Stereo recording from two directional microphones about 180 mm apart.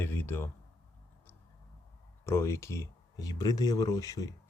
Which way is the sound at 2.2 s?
15° left (ahead or behind).